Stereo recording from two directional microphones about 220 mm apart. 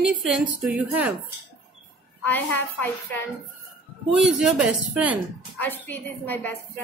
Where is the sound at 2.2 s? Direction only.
10° left (ahead or behind).